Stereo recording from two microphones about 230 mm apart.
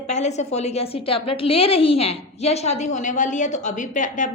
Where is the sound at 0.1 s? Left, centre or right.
Left.